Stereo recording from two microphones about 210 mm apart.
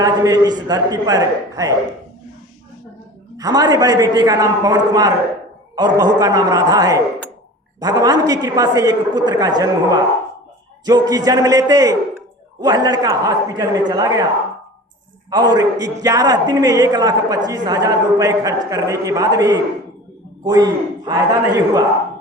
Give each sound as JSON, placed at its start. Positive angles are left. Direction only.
{"t": 0.0, "sound": "a man's voice", "side_deg": -20}
{"t": 3.3, "sound": "a man's voice", "side_deg": -20}
{"t": 15.3, "sound": "a man's voice", "side_deg": -20}